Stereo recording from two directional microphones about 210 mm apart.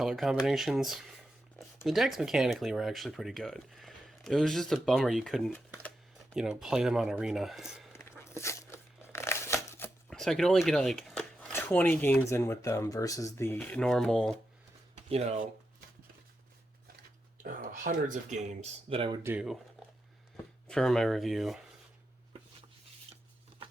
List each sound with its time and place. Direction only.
0.0 s speech: centre (ahead or behind)
8.3 s tearing: 10° left (ahead or behind)
10.1 s speech: centre (ahead or behind)
15.1 s speech: 30° right (ahead or behind)
17.4 s speech: 40° right (ahead or behind); by 19.2 s 25° right (ahead or behind)
19.2 s speech: 5° right (ahead or behind)
20.7 s speech: 5° left (ahead or behind)